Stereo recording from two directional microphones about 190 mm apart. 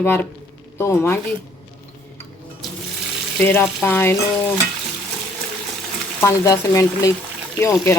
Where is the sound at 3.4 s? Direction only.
10° left (ahead or behind).